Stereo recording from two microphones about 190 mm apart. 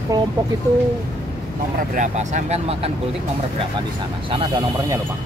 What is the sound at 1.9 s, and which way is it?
Speech, 40° right (ahead or behind).